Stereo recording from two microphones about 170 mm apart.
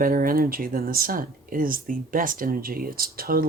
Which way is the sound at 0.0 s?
55° right (ahead or behind).